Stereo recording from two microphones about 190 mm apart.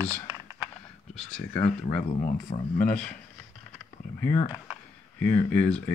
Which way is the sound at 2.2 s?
40° left (ahead or behind).